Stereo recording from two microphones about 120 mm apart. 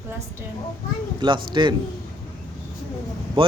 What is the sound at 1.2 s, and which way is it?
Speech, 40° right (ahead or behind).